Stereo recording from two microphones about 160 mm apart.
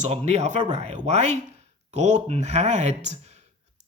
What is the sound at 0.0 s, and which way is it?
Speech, 45° right (ahead or behind).